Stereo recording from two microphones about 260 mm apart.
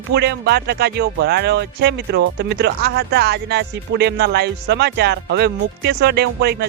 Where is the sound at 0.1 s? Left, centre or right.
Right.